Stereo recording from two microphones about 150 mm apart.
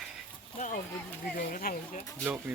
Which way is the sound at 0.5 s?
55° left (ahead or behind).